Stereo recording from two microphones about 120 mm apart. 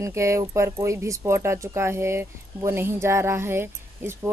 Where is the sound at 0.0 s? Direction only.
25° right (ahead or behind).